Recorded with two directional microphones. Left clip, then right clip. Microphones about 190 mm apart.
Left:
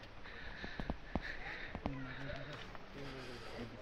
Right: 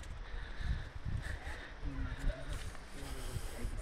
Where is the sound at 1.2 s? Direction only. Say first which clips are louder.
Left 2 dB; 25° right (ahead or behind).